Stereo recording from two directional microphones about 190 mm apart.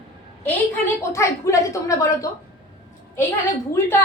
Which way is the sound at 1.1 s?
15° left (ahead or behind).